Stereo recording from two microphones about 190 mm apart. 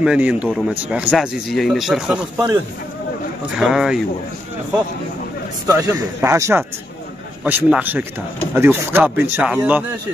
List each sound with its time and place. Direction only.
0.0 s a man's voice: 5° right (ahead or behind)
3.5 s a man's voice: centre (ahead or behind)
5.7 s speech: 15° right (ahead or behind)